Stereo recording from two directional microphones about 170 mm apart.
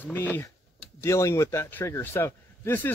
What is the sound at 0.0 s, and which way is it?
Speech, 10° left (ahead or behind).